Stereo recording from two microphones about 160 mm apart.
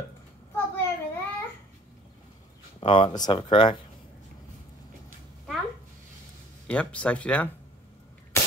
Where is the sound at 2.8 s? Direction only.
35° left (ahead or behind).